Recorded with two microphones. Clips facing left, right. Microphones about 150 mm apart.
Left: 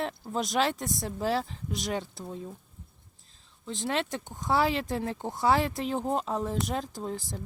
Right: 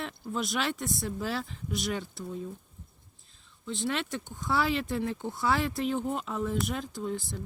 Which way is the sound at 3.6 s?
35° left (ahead or behind).